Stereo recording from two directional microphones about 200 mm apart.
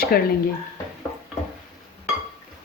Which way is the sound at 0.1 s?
50° left (ahead or behind).